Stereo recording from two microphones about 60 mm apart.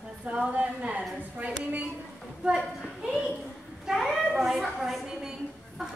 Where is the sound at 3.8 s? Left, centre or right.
Centre.